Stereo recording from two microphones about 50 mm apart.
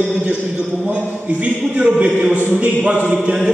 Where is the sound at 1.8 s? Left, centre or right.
Right.